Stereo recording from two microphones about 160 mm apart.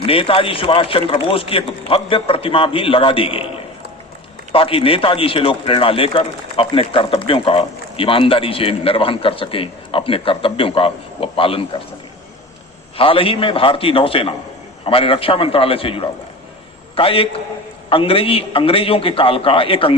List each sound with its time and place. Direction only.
0.0 s speech: 35° left (ahead or behind)
4.5 s speech: 35° left (ahead or behind)
13.0 s speech: 35° left (ahead or behind)